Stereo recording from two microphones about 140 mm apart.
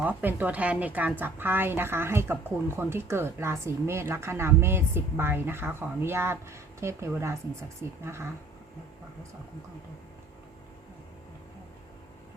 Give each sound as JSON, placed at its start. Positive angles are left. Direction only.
{"t": 0.0, "sound": "a woman's voice", "side_deg": -10}